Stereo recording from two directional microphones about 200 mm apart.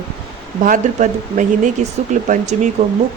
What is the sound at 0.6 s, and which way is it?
Speech, 40° right (ahead or behind).